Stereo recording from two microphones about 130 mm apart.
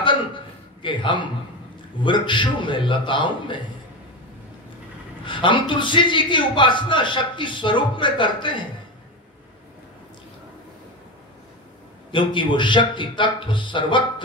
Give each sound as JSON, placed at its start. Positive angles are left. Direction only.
{"t": 0.8, "sound": "a man's voice", "side_deg": 40}
{"t": 5.2, "sound": "a man's voice", "side_deg": 40}
{"t": 12.1, "sound": "a man's voice", "side_deg": 40}